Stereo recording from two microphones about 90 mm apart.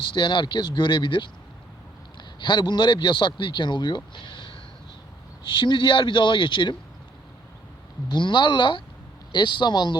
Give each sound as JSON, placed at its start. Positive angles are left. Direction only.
{"t": 0.1, "sound": "a man's voice", "side_deg": 60}
{"t": 8.0, "sound": "speech", "side_deg": 55}